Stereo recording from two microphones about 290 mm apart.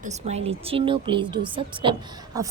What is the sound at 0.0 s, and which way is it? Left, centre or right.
A woman's voice, right.